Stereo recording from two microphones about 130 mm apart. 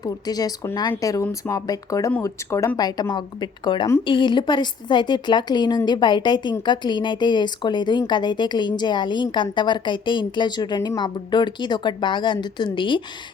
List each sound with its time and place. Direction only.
0.0 s speech: 30° left (ahead or behind)